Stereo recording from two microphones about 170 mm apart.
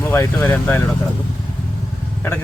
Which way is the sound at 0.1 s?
15° left (ahead or behind).